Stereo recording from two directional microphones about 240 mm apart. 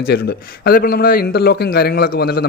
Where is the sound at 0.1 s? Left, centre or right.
Left.